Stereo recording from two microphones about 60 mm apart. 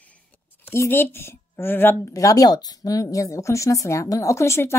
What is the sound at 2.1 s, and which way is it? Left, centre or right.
Speech, left.